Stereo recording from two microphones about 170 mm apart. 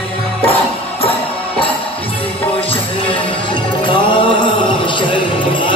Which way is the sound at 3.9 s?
30° left (ahead or behind).